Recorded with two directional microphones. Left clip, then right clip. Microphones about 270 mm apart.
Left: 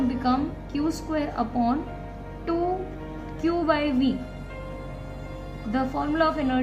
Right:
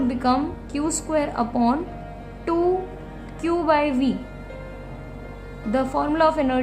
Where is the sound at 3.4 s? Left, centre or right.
Right.